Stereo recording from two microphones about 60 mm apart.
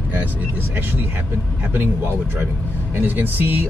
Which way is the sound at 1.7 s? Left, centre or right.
Right.